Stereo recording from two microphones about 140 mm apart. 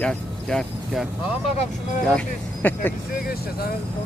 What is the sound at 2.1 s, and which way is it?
Speech, 10° left (ahead or behind).